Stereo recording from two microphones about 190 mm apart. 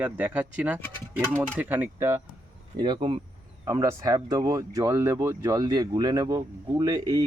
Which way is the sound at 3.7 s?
15° right (ahead or behind).